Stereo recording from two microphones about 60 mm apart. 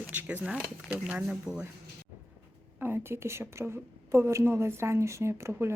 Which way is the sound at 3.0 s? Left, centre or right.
Right.